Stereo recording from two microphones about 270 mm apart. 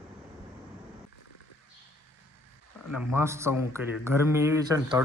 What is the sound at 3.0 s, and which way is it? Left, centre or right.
A man's voice, centre.